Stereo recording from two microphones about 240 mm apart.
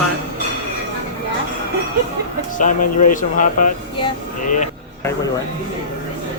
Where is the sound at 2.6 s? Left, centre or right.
Left.